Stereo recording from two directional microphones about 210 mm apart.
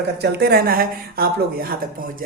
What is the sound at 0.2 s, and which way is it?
Speech, 50° right (ahead or behind).